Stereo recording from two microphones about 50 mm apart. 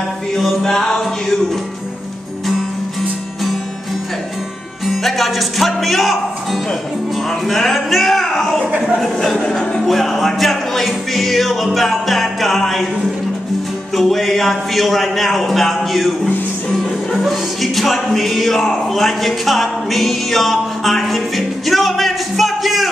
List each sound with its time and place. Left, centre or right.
0.6 s music: centre
4.8 s speech: centre
7.2 s music: centre
8.6 s speech: centre
9.0 s music: centre
13.9 s music: centre
17.1 s music: centre